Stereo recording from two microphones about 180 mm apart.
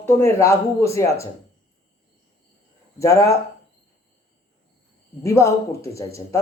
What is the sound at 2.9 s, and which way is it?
Speech, 15° left (ahead or behind).